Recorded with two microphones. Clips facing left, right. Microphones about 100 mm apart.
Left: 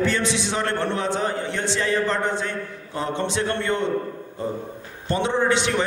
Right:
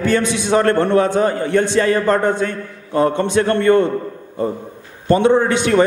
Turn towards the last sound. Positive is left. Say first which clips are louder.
# right 7 dB
turn(degrees=-50)  # may be behind; listen again after turning